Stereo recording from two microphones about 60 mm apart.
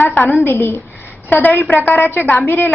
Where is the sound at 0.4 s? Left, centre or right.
Left.